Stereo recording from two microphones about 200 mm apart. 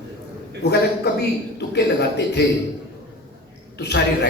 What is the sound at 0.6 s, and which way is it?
A man's voice, 55° left (ahead or behind).